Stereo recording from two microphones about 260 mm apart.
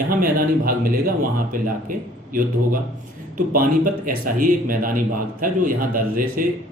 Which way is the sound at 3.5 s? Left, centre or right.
Right.